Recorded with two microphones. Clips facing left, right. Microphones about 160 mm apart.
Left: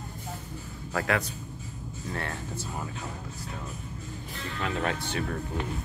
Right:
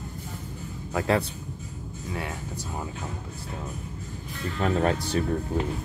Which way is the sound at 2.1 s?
10° right (ahead or behind).